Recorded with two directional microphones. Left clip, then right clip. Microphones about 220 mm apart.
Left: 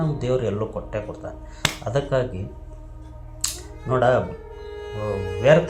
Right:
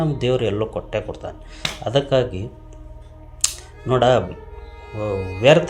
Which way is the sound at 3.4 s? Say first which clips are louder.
Right 5 dB; 40° right (ahead or behind).